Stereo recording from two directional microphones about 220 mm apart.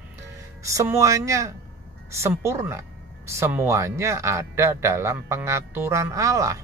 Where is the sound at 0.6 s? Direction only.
15° right (ahead or behind).